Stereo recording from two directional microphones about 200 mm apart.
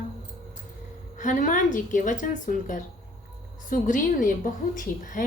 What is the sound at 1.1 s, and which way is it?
Speech, 40° left (ahead or behind).